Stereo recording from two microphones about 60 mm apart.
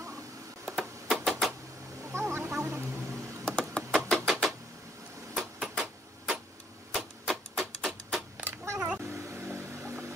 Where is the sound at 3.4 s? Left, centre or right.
Centre.